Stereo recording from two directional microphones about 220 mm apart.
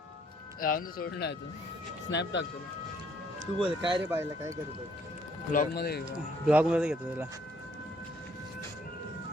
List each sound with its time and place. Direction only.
0.6 s speech: 40° left (ahead or behind)
3.4 s speech: 20° right (ahead or behind)
4.0 s speech: 10° right (ahead or behind)
5.5 s speech: 40° left (ahead or behind)
6.1 s speech: 5° right (ahead or behind)